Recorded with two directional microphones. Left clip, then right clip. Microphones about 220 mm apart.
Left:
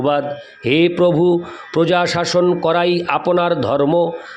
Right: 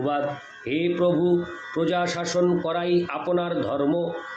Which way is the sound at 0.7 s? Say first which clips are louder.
Left 9 dB; 50° left (ahead or behind).